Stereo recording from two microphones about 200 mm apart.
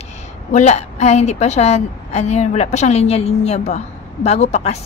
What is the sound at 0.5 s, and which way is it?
A woman's voice, 35° left (ahead or behind).